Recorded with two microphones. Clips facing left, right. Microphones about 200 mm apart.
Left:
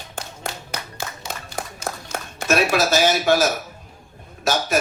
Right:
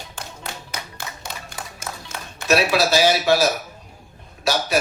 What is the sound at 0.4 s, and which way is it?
Clapping, 50° left (ahead or behind).